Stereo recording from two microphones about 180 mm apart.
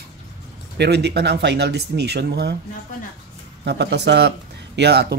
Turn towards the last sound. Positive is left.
turn(degrees=-65)  # may be behind; listen again after turning